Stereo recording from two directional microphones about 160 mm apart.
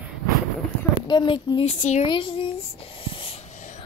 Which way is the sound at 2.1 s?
35° left (ahead or behind).